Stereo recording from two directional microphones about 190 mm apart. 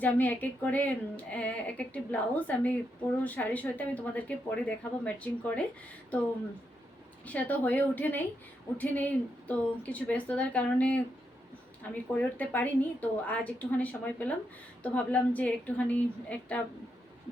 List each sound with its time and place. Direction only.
0.0 s a woman's voice: 10° left (ahead or behind)
7.3 s a woman's voice: 10° left (ahead or behind)